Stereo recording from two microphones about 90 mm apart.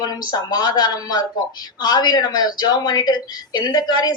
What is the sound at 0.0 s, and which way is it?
Speech, 45° left (ahead or behind).